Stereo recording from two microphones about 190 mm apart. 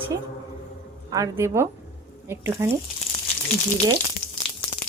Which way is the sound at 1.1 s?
15° right (ahead or behind).